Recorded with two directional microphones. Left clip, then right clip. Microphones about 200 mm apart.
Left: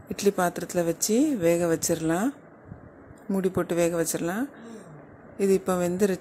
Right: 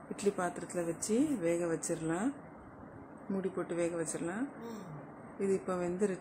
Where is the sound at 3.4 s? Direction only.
45° left (ahead or behind).